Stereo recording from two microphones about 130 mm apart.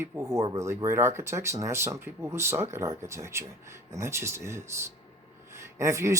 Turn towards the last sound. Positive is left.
turn(degrees=-25)  # may be behind; listen again after turning